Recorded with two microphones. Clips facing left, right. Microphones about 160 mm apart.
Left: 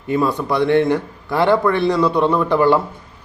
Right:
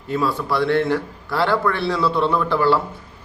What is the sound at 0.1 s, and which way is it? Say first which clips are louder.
A man's voice: left 3 dB; 15° left (ahead or behind).